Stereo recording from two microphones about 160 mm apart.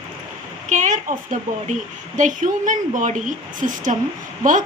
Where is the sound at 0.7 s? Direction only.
50° right (ahead or behind).